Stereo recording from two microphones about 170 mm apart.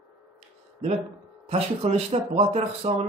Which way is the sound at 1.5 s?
40° right (ahead or behind).